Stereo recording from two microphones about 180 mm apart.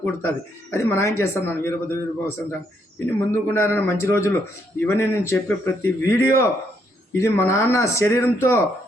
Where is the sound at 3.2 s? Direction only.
15° left (ahead or behind).